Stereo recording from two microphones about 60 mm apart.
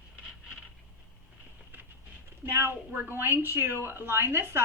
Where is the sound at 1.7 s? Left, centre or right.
Right.